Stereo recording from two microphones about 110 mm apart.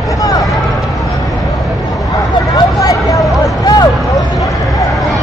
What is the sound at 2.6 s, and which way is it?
Vehicle, 30° left (ahead or behind).